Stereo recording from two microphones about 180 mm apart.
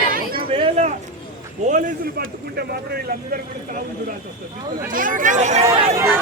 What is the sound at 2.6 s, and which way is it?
Speech, 60° right (ahead or behind).